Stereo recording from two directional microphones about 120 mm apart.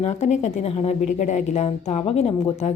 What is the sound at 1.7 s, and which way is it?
A woman's voice, 60° left (ahead or behind).